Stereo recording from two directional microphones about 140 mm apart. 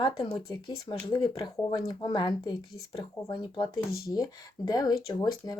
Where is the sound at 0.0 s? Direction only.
40° left (ahead or behind).